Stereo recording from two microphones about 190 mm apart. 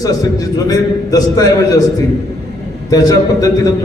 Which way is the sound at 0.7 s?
20° left (ahead or behind).